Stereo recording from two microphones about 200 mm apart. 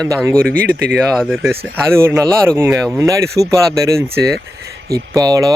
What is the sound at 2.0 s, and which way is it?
Speech, 15° right (ahead or behind).